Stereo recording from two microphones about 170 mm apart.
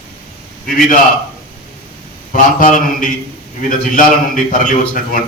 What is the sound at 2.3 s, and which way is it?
A man's voice, 50° left (ahead or behind).